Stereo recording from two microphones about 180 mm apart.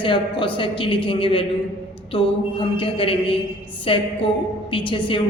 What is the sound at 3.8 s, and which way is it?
A woman's voice, 30° left (ahead or behind).